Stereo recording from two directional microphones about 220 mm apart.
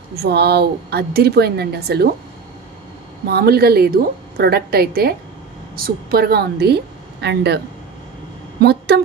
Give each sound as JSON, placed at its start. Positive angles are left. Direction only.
{"t": 0.1, "sound": "a woman's voice", "side_deg": -45}
{"t": 3.3, "sound": "a woman's voice", "side_deg": -45}